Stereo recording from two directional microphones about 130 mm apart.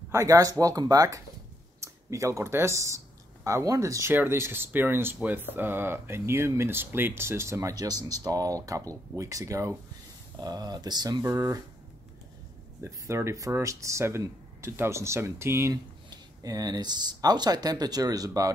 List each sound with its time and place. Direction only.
0.1 s speech: 25° right (ahead or behind)
12.8 s speech: 20° right (ahead or behind)